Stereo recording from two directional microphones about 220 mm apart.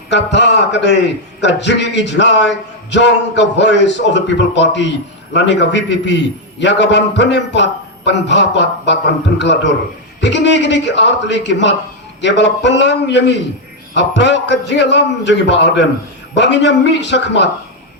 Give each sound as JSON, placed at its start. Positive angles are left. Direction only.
{"t": 0.1, "sound": "a man's voice", "side_deg": 50}
{"t": 10.2, "sound": "a man's voice", "side_deg": 50}